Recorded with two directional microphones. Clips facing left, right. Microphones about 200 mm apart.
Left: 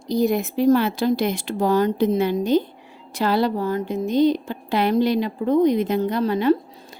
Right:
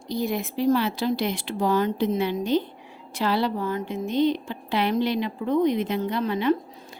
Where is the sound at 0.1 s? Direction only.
40° left (ahead or behind).